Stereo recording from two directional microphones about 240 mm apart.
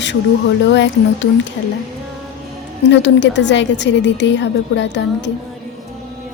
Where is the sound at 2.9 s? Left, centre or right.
Left.